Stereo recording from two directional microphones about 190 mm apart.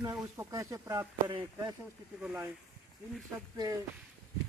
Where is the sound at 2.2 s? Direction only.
5° right (ahead or behind).